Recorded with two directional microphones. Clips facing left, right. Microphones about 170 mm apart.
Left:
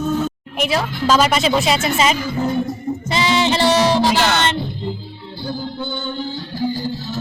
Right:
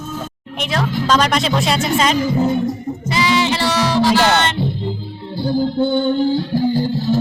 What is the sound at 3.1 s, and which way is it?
Music, 25° left (ahead or behind).